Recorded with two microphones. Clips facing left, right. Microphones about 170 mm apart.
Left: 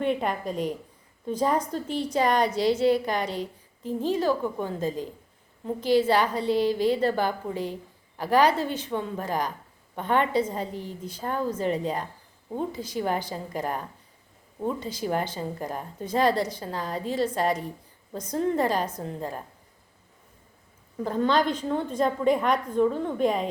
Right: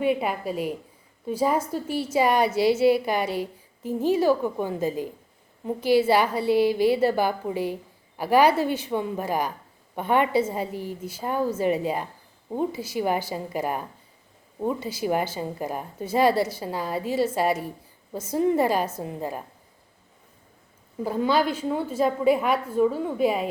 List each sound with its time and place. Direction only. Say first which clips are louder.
0.0 s a woman's voice: right 2 dB; 5° right (ahead or behind)
21.0 s a woman's voice: right 1 dB; 10° right (ahead or behind)